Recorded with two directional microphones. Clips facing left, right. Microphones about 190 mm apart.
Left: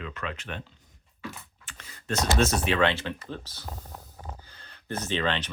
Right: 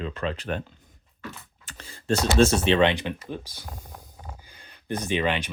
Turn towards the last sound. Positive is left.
turn(degrees=-15)  # may be behind; listen again after turning